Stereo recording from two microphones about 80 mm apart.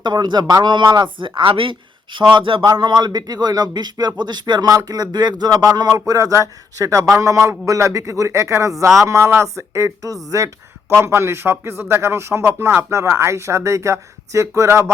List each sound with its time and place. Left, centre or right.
0.0 s a man's voice: right
4.7 s a man's voice: right